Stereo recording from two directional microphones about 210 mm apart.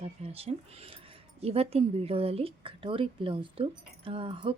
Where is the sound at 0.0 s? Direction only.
30° right (ahead or behind).